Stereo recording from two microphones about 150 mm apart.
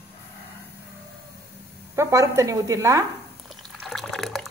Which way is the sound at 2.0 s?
20° right (ahead or behind).